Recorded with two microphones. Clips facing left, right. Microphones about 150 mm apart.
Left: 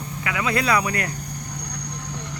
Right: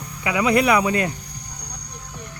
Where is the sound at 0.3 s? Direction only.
20° right (ahead or behind).